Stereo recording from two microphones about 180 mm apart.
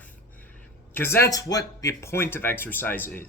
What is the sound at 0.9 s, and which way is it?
Speech, 15° left (ahead or behind).